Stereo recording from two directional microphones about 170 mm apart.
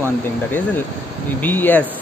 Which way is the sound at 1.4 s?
10° left (ahead or behind).